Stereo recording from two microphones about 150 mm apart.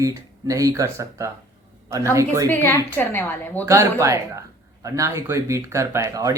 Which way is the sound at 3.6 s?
20° right (ahead or behind).